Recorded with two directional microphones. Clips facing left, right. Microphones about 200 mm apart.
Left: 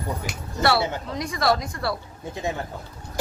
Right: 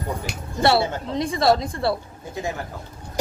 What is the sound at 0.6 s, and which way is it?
A woman's voice, 25° right (ahead or behind).